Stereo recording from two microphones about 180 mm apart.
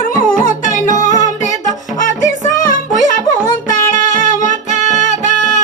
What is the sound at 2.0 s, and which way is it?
Music, 45° left (ahead or behind).